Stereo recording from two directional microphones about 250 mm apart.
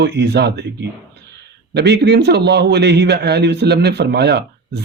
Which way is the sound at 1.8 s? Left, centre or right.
Right.